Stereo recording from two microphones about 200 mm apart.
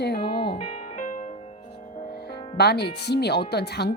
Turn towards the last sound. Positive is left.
turn(degrees=55)  # may be behind; listen again after turning